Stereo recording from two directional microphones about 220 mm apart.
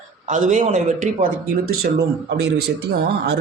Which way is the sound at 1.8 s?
50° right (ahead or behind).